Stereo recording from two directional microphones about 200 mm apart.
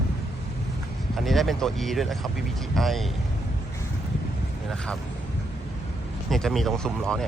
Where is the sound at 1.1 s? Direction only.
Centre (ahead or behind).